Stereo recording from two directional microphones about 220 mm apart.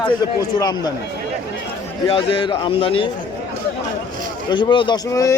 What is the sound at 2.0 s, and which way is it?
A man's voice, 25° left (ahead or behind).